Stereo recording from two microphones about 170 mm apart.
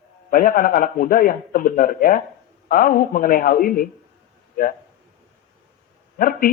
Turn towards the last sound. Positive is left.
turn(degrees=55)  # may be behind; listen again after turning